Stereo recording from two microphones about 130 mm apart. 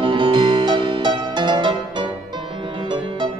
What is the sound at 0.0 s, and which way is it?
Music, 40° right (ahead or behind).